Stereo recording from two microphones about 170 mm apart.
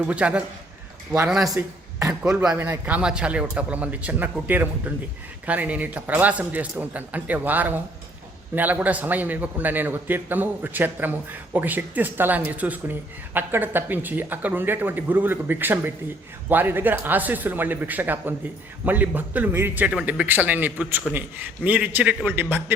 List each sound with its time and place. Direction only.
0.0 s a man's voice: 5° right (ahead or behind)
1.5 s speech: 20° right (ahead or behind)
2.4 s a man's voice: 10° right (ahead or behind)